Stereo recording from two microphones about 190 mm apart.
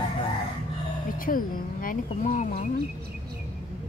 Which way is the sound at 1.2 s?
45° left (ahead or behind).